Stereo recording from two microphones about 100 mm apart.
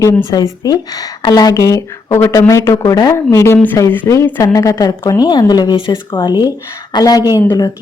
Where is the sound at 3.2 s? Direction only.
25° left (ahead or behind).